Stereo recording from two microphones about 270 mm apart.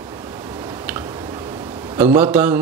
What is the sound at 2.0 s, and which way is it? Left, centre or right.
Speech, centre.